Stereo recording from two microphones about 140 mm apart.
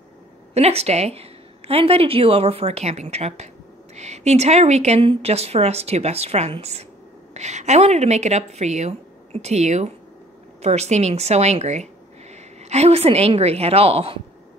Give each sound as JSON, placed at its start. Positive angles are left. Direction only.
{"t": 0.6, "sound": "a woman's voice", "side_deg": -50}